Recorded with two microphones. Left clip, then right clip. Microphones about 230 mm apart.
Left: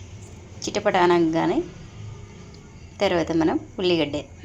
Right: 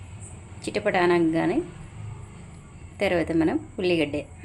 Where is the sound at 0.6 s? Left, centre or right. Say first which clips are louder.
Left 3 dB; centre.